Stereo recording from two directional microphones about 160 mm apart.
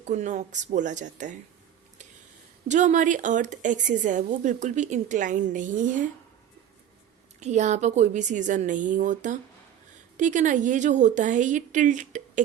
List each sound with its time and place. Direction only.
0.0 s a woman's voice: 50° right (ahead or behind)
2.6 s a woman's voice: 50° right (ahead or behind)
7.3 s a woman's voice: 45° right (ahead or behind)